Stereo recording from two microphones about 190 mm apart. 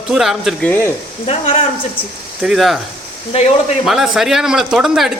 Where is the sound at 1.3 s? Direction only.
30° left (ahead or behind).